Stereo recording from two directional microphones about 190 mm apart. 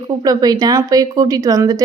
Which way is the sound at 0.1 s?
20° right (ahead or behind).